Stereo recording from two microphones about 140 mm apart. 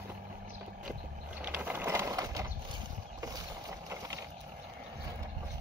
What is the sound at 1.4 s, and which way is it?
Ratchet, 15° right (ahead or behind).